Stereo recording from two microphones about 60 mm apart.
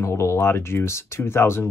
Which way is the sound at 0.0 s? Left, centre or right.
Left.